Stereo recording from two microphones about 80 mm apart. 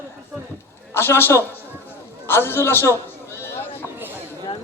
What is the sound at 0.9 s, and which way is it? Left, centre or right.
A man's voice, left.